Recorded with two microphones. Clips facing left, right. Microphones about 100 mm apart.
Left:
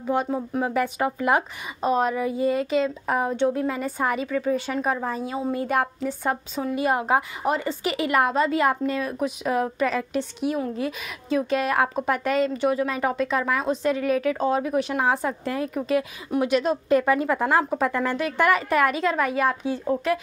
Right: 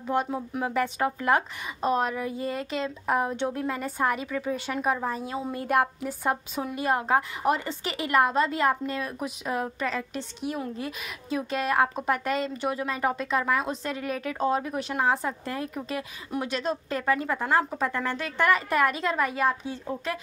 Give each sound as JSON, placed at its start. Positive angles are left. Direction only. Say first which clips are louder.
{"t": 0.1, "sound": "a woman's voice", "louder": "left 3 dB", "side_deg": 0}
{"t": 6.8, "sound": "a woman's voice", "louder": "left 2 dB", "side_deg": 5}